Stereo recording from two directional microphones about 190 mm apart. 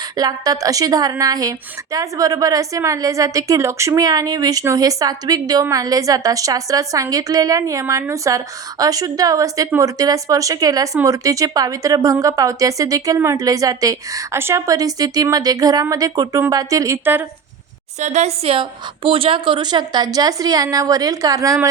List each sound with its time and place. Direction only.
0.2 s a woman's voice: 20° right (ahead or behind)
18.0 s a woman's voice: 40° right (ahead or behind); by 21.7 s 15° right (ahead or behind)